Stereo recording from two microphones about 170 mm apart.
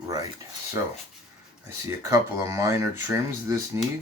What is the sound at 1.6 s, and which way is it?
Speech, 15° right (ahead or behind).